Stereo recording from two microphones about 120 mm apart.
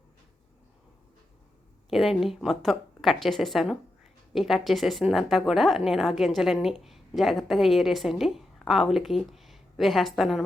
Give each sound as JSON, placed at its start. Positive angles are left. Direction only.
{"t": 1.9, "sound": "a woman's voice", "side_deg": 0}